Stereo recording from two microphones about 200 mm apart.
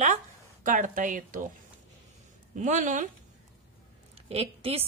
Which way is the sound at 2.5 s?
40° right (ahead or behind).